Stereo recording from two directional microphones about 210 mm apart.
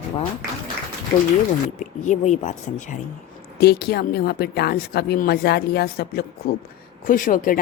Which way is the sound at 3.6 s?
50° left (ahead or behind).